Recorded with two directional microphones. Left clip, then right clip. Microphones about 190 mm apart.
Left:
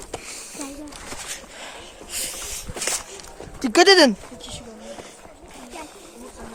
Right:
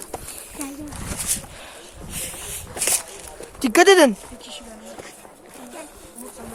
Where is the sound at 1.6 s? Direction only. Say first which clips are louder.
Left 2 dB; 25° left (ahead or behind).